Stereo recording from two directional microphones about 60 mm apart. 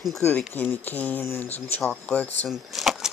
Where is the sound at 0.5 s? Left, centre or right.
Left.